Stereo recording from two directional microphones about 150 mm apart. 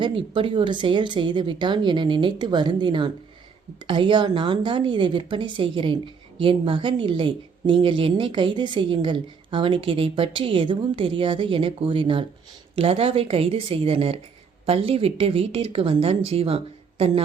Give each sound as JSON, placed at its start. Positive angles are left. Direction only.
{"t": 0.0, "sound": "a woman's voice", "side_deg": -35}